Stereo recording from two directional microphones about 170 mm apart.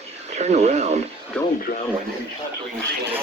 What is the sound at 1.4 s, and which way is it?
Speech, 10° left (ahead or behind).